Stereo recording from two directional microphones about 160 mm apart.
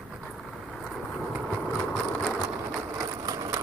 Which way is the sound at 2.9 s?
20° right (ahead or behind).